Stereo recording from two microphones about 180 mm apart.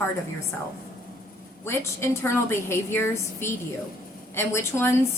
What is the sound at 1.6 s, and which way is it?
A woman's voice, 15° left (ahead or behind).